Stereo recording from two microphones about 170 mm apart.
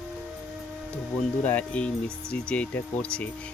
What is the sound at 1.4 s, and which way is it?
Speech, 10° left (ahead or behind).